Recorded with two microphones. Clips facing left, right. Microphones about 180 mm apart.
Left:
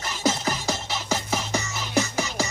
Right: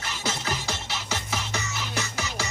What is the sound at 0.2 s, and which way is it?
Music, 40° left (ahead or behind).